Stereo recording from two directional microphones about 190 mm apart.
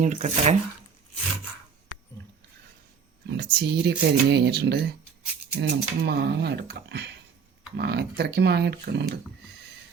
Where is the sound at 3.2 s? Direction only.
55° right (ahead or behind).